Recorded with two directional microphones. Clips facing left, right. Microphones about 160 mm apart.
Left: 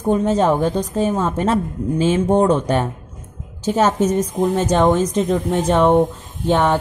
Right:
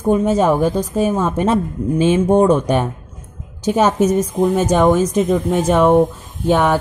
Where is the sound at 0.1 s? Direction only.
10° right (ahead or behind).